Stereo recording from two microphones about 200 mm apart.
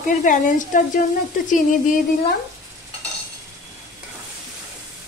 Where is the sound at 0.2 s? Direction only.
40° left (ahead or behind).